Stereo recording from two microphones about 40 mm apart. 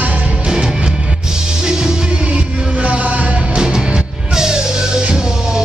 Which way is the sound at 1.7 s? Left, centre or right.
Centre.